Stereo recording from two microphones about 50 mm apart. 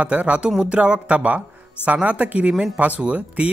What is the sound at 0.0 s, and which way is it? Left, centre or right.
Speech, right.